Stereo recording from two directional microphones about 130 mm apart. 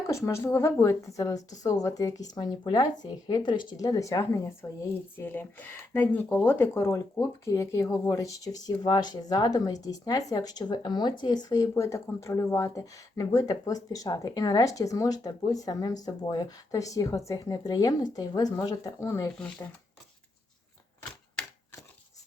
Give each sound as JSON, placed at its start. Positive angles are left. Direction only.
{"t": 0.1, "sound": "speech", "side_deg": 20}
{"t": 19.3, "sound": "speech", "side_deg": 10}